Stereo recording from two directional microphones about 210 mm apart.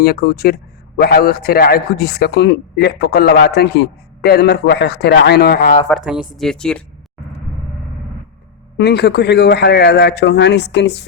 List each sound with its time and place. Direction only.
0.0 s a man's voice: 45° left (ahead or behind)
6.3 s speech: centre (ahead or behind)
8.8 s a man's voice: 55° left (ahead or behind)